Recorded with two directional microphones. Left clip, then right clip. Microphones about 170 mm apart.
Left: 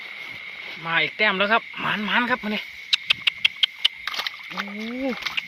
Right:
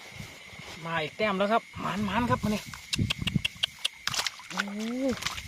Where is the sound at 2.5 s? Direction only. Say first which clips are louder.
Left 9 dB; 10° right (ahead or behind).